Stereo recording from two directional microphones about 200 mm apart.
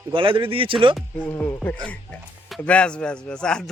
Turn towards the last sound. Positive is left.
turn(degrees=5)  # may be behind; listen again after turning